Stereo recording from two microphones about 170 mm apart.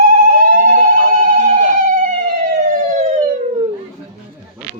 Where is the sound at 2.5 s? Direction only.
40° right (ahead or behind).